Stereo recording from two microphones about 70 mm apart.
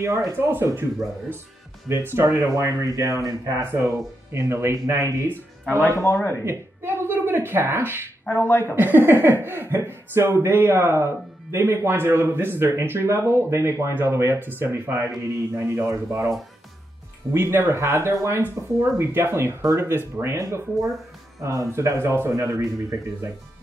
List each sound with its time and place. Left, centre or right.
0.0 s speech: right
0.3 s speech: right
1.9 s speech: right
3.8 s speech: right
5.8 s speech: left
6.4 s speech: right
8.3 s speech: left
8.7 s speech: right
17.3 s speech: right
22.3 s speech: right